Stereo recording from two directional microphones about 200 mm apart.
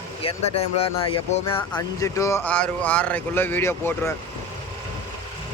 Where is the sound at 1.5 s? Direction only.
15° left (ahead or behind).